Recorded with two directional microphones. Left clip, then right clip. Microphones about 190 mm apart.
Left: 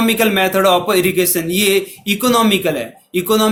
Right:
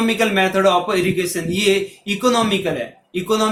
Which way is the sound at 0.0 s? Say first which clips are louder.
Left 3 dB; 50° left (ahead or behind).